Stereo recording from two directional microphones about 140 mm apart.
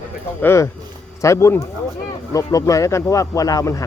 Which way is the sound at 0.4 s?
20° left (ahead or behind).